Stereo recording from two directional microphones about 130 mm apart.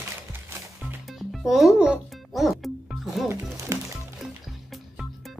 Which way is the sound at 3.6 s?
20° right (ahead or behind).